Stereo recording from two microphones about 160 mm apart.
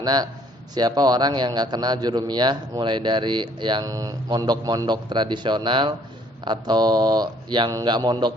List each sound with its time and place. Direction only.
0.0 s a man's voice: 25° right (ahead or behind)